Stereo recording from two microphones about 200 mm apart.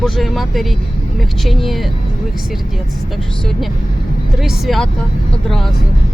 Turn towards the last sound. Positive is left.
turn(degrees=0)  # may be behind; listen again after turning